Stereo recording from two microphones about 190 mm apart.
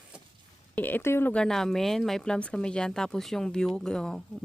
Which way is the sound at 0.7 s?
10° left (ahead or behind).